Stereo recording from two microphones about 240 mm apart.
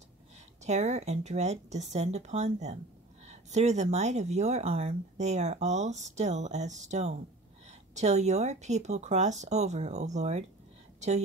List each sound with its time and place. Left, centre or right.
0.7 s a woman's voice: right